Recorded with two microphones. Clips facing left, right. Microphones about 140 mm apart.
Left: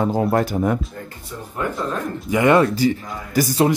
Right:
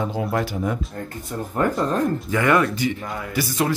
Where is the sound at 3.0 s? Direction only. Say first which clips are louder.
Right 2 dB; 65° right (ahead or behind).